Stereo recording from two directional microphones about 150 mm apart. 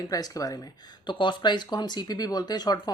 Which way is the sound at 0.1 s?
25° left (ahead or behind).